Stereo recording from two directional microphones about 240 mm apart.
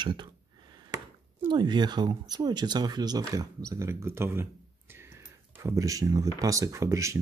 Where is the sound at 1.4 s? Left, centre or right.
Centre.